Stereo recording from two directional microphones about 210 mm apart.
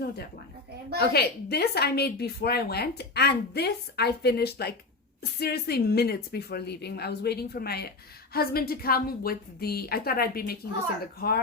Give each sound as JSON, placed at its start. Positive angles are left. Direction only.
{"t": 0.9, "sound": "a woman's voice", "side_deg": 50}